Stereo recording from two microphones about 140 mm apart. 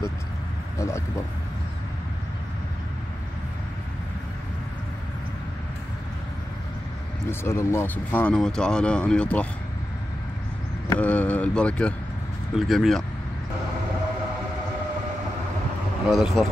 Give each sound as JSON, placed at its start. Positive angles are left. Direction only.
{"t": 0.7, "sound": "speech", "side_deg": 20}
{"t": 7.2, "sound": "speech", "side_deg": 20}
{"t": 10.9, "sound": "speech", "side_deg": 10}
{"t": 16.1, "sound": "speech", "side_deg": 0}